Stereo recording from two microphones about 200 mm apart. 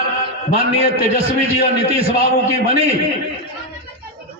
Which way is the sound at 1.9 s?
30° right (ahead or behind).